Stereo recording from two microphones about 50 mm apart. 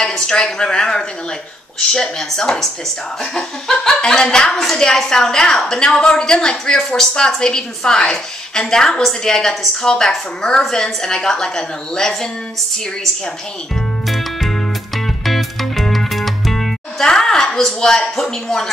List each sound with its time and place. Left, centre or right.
0.0 s a woman's voice: centre
14.0 s music: centre